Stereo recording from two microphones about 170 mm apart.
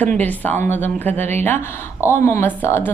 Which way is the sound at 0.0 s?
10° left (ahead or behind).